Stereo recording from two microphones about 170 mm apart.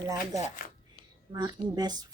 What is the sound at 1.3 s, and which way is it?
Speech, 25° right (ahead or behind).